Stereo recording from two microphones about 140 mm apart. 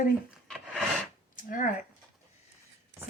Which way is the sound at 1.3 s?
75° left (ahead or behind).